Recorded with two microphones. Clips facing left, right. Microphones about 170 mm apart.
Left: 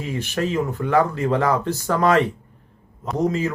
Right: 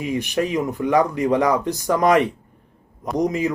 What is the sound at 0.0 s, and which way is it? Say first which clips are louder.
Speech: right 2 dB; 15° right (ahead or behind).